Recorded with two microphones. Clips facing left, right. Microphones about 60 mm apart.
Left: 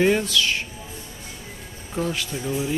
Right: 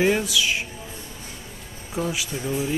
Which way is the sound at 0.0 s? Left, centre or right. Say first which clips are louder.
Left 1 dB; centre.